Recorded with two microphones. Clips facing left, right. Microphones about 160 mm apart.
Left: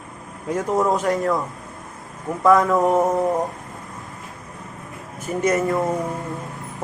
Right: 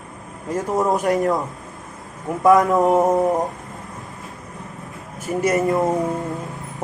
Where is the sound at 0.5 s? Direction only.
Centre (ahead or behind).